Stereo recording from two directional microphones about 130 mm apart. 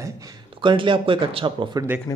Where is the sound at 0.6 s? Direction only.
40° right (ahead or behind).